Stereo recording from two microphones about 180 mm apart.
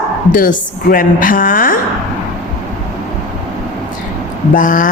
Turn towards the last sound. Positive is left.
turn(degrees=50)  # may be behind; listen again after turning